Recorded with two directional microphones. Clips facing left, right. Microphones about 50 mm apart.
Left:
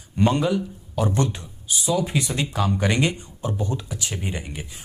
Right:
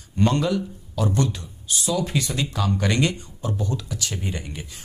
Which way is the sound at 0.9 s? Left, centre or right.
Left.